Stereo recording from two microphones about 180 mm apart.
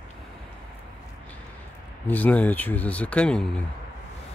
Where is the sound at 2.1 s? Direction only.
10° left (ahead or behind).